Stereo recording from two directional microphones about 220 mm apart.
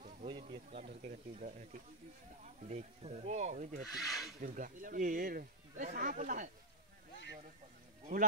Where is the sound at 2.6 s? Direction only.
30° right (ahead or behind).